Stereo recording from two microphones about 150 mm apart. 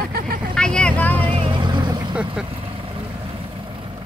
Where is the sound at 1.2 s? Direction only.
35° right (ahead or behind).